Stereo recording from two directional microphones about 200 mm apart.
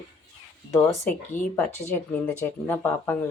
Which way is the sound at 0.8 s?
10° left (ahead or behind).